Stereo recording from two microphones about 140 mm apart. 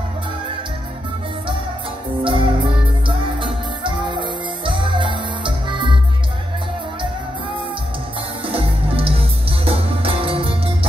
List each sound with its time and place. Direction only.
2.2 s music: 40° right (ahead or behind)
8.5 s music: 40° right (ahead or behind)